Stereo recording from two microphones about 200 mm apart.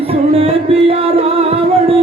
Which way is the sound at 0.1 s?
30° right (ahead or behind).